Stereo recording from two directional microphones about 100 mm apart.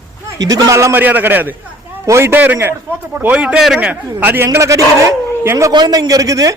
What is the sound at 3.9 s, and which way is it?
A man's voice, 20° right (ahead or behind).